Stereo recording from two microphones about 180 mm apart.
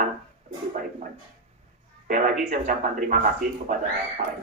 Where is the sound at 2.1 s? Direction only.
50° right (ahead or behind).